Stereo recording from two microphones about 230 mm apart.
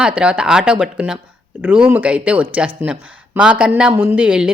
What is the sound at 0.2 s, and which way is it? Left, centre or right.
Speech, centre.